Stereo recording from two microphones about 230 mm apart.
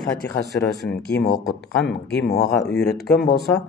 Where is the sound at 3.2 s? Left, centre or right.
Left.